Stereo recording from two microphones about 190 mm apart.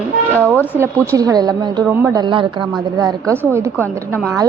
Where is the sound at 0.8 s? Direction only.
15° right (ahead or behind).